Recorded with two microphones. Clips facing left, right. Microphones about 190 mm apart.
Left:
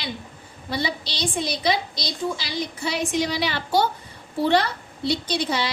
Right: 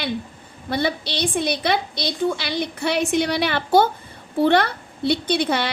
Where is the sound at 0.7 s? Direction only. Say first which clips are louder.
Right 4 dB; 55° right (ahead or behind).